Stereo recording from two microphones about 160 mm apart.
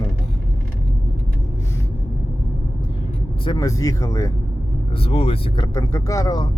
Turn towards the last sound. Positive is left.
turn(degrees=20)  # may be behind; listen again after turning